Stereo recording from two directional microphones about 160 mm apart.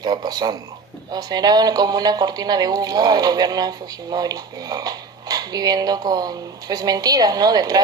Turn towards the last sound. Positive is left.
turn(degrees=-25)  # may be behind; listen again after turning